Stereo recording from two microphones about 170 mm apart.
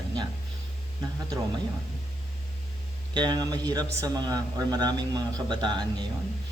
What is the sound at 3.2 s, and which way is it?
Speech, 25° right (ahead or behind).